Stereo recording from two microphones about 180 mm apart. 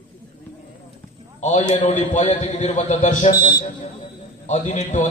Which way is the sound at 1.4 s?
40° left (ahead or behind).